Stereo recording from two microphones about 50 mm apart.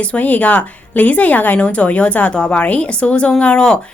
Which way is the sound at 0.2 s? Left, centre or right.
Left.